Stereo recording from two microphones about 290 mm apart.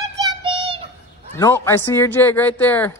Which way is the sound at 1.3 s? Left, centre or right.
Centre.